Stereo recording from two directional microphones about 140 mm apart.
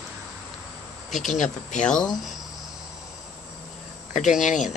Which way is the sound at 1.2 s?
60° left (ahead or behind).